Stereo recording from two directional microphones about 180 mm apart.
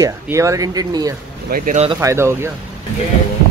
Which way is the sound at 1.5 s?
50° right (ahead or behind).